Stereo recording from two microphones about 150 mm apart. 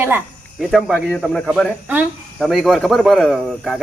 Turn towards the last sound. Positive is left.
turn(degrees=0)  # may be behind; listen again after turning